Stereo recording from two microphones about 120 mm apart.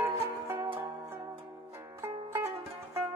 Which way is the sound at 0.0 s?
25° right (ahead or behind).